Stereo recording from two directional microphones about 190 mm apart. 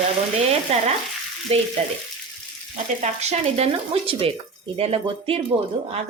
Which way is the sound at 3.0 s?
35° right (ahead or behind).